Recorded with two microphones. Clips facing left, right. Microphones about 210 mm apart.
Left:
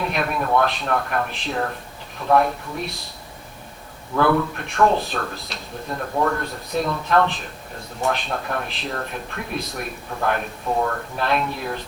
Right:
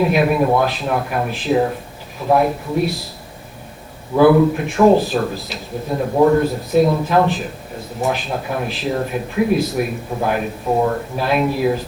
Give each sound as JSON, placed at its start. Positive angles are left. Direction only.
{"t": 0.0, "sound": "speech", "side_deg": -5}
{"t": 4.2, "sound": "speech", "side_deg": -5}
{"t": 5.9, "sound": "speech", "side_deg": -25}
{"t": 6.4, "sound": "speech", "side_deg": 0}
{"t": 10.1, "sound": "speech", "side_deg": -15}
{"t": 11.2, "sound": "speech", "side_deg": -5}